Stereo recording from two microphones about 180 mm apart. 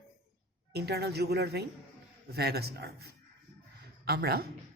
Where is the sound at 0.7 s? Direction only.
65° right (ahead or behind).